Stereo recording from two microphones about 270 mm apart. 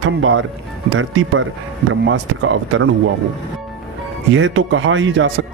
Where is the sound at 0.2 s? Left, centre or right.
Right.